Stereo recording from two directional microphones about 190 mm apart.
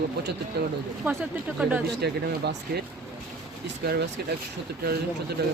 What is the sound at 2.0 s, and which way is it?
Speech, 60° right (ahead or behind).